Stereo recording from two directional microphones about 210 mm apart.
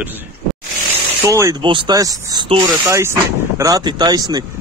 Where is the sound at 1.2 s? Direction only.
15° right (ahead or behind).